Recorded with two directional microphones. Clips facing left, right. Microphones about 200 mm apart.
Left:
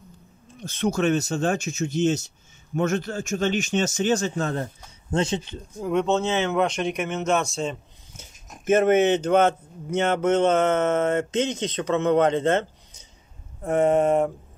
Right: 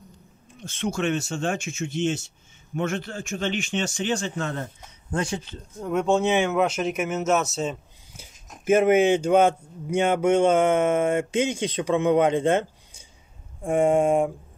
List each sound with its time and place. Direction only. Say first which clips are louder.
0.6 s speech: left 4 dB; 40° left (ahead or behind)
5.1 s speech: left 3 dB; 20° left (ahead or behind)
5.8 s speech: left 2 dB; centre (ahead or behind)
6.0 s speech: right 2 dB; 15° right (ahead or behind)